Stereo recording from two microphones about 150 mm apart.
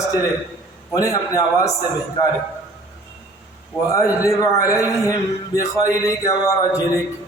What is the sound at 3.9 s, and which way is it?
A man's voice, 20° left (ahead or behind).